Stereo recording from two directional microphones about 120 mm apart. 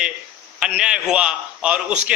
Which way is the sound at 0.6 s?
5° right (ahead or behind).